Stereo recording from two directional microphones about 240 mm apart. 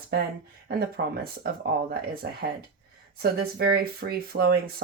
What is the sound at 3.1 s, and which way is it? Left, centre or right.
Speech, right.